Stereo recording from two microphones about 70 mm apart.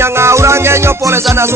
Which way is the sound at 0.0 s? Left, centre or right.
Right.